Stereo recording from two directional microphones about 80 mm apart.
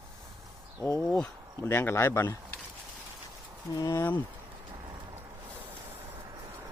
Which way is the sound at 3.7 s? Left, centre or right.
Left.